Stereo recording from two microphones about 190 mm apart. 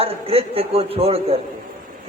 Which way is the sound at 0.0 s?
30° right (ahead or behind).